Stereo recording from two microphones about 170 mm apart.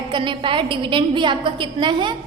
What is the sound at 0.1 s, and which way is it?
A woman's voice, 30° right (ahead or behind).